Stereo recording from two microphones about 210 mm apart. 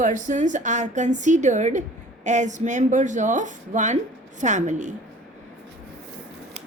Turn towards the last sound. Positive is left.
turn(degrees=-35)  # may be behind; listen again after turning